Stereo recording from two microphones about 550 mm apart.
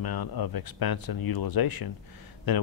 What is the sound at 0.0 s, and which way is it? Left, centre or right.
Speech, left.